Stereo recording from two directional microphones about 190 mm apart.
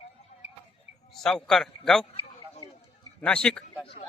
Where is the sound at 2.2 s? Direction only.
30° left (ahead or behind).